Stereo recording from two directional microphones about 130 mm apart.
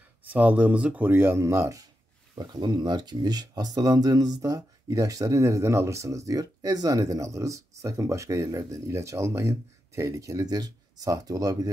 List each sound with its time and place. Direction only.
0.2 s speech: 10° right (ahead or behind); by 11.7 s 25° right (ahead or behind)